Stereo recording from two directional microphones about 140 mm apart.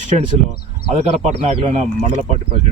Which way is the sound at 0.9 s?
50° right (ahead or behind).